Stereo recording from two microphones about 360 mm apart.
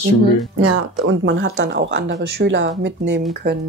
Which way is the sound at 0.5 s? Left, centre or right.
Right.